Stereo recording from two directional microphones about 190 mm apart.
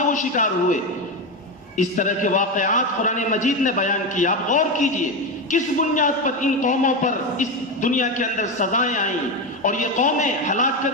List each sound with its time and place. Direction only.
0.1 s a man's voice: 40° left (ahead or behind)
1.8 s a man's voice: 40° left (ahead or behind)